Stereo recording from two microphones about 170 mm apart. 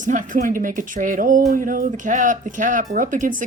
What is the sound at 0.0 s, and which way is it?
Speech, 50° right (ahead or behind).